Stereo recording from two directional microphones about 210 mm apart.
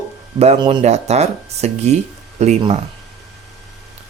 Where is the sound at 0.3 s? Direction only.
30° right (ahead or behind).